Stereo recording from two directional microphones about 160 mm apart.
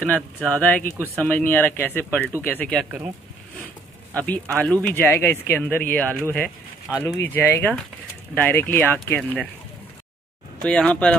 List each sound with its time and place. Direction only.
0.0 s speech: 10° left (ahead or behind)
4.1 s speech: 10° left (ahead or behind)
10.6 s speech: 5° left (ahead or behind)